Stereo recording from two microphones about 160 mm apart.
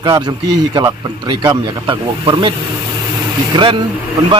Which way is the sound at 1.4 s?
30° right (ahead or behind).